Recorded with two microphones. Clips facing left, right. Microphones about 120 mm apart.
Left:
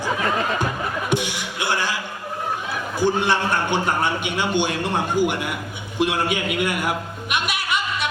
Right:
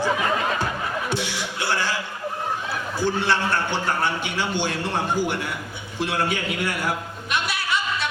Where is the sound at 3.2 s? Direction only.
15° left (ahead or behind).